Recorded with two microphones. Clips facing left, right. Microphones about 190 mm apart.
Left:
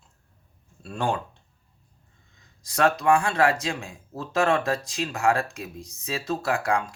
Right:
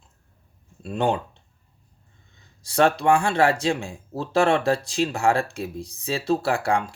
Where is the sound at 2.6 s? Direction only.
30° right (ahead or behind).